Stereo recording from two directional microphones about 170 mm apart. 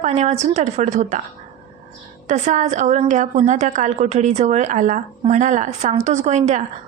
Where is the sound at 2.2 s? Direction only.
45° right (ahead or behind).